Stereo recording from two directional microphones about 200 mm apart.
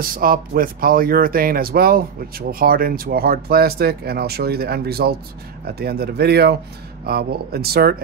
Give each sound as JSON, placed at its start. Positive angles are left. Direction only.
{"t": 0.0, "sound": "speech", "side_deg": -45}